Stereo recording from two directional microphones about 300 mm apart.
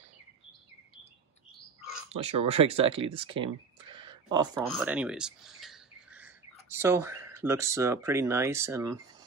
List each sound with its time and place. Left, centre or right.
2.0 s speech: right
4.6 s speech: centre